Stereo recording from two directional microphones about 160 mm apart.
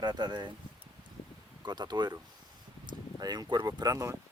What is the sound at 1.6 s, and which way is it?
Speech, 25° right (ahead or behind).